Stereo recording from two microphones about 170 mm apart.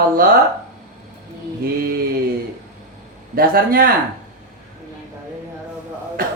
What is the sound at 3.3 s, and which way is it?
Speech, 60° right (ahead or behind).